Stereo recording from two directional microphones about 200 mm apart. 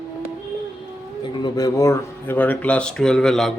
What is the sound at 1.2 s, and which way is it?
Speech, 20° left (ahead or behind).